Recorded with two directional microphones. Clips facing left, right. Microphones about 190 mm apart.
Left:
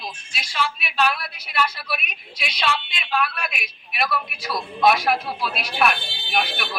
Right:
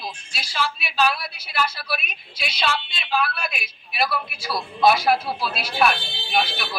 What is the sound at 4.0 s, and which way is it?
A man's voice, centre (ahead or behind).